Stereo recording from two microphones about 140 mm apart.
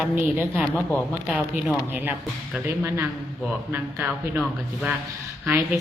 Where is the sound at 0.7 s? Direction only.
10° left (ahead or behind).